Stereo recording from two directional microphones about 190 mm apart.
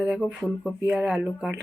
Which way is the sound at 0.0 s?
5° right (ahead or behind).